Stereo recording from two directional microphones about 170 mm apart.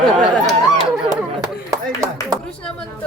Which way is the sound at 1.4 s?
20° right (ahead or behind).